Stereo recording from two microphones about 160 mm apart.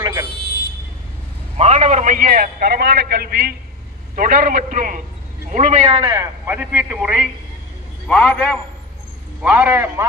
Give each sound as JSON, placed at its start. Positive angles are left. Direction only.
{"t": 0.0, "sound": "vehicle", "side_deg": -25}
{"t": 1.6, "sound": "a man's voice", "side_deg": -45}
{"t": 4.1, "sound": "a man's voice", "side_deg": -60}
{"t": 6.1, "sound": "a man's voice", "side_deg": -10}
{"t": 9.4, "sound": "a man's voice", "side_deg": -10}